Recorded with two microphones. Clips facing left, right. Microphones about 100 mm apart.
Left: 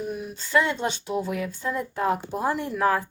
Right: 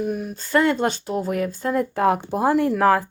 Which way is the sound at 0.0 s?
50° right (ahead or behind).